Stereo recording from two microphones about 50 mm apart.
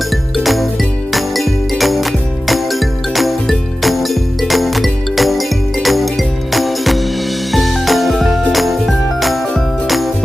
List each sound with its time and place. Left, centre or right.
0.4 s music: centre